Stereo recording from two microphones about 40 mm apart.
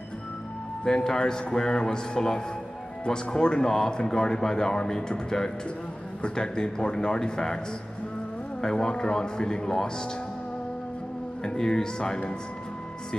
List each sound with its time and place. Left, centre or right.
0.8 s speech: centre
8.5 s speech: centre
11.4 s speech: centre